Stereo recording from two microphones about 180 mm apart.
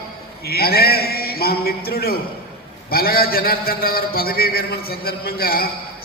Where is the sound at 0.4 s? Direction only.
60° left (ahead or behind).